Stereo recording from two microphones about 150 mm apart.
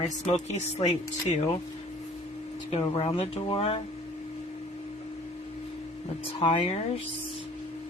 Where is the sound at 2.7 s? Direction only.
40° left (ahead or behind).